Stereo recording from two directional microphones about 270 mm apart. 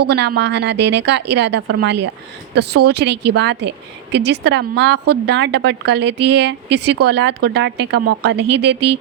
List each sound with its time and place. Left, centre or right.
0.0 s speech: right